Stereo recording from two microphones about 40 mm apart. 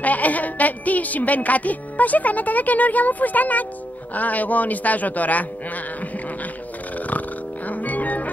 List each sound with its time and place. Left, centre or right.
0.0 s speech: left
7.1 s music: left